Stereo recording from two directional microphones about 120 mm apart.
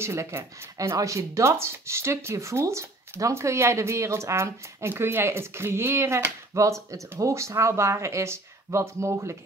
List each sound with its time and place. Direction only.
0.0 s speech: 20° right (ahead or behind)